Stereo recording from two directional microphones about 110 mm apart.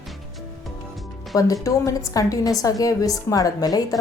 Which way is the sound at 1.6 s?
30° left (ahead or behind).